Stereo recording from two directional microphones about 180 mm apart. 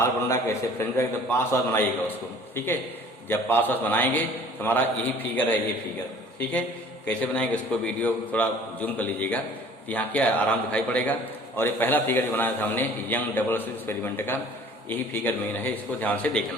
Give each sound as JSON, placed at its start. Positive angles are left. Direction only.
{"t": 0.0, "sound": "a man's voice", "side_deg": 15}